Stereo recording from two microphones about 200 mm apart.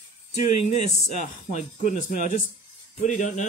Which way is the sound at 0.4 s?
35° left (ahead or behind).